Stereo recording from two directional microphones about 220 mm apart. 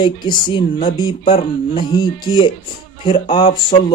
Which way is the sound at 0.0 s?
20° left (ahead or behind).